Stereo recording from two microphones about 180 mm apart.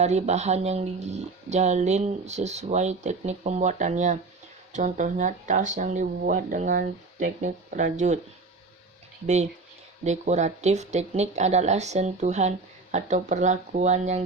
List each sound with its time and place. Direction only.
0.0 s speech: 40° right (ahead or behind)
9.2 s speech: 40° right (ahead or behind)